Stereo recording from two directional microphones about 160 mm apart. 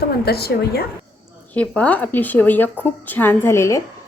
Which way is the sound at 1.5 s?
10° left (ahead or behind).